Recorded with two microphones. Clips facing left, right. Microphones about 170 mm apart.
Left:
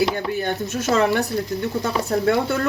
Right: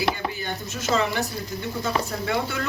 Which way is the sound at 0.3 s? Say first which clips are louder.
Left 8 dB; 60° left (ahead or behind).